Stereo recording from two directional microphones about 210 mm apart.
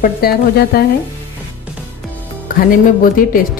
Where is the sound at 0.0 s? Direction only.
45° left (ahead or behind).